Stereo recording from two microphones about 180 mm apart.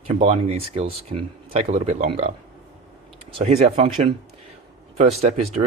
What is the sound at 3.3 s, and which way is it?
Speech, 35° right (ahead or behind).